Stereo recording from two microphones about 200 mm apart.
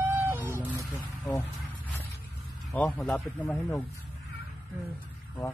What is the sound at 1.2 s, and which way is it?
Speech, 10° left (ahead or behind).